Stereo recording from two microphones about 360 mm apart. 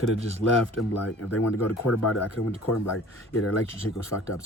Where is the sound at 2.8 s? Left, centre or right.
Left.